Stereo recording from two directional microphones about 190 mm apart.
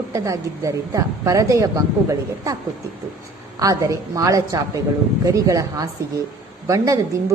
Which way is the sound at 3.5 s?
15° right (ahead or behind).